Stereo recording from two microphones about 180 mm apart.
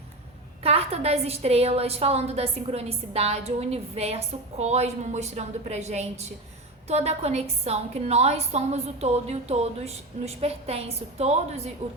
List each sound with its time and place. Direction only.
0.6 s a woman's voice: 35° right (ahead or behind)